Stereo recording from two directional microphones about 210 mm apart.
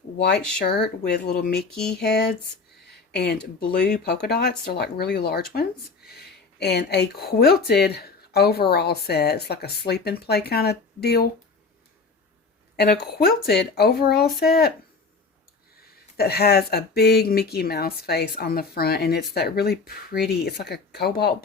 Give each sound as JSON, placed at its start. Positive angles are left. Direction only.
{"t": 0.3, "sound": "speech", "side_deg": 5}
{"t": 0.6, "sound": "speech", "side_deg": 50}
{"t": 1.7, "sound": "speech", "side_deg": 5}
{"t": 2.0, "sound": "speech", "side_deg": 50}
{"t": 12.7, "sound": "a woman's voice", "side_deg": 50}
{"t": 16.1, "sound": "speech", "side_deg": 50}